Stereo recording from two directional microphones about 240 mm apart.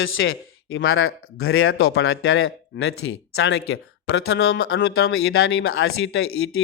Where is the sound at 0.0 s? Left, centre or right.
Left.